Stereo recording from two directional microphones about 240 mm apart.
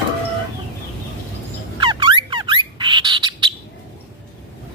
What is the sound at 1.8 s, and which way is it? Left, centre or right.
Bird, centre.